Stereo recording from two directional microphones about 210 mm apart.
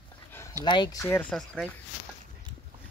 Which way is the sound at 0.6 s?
20° left (ahead or behind).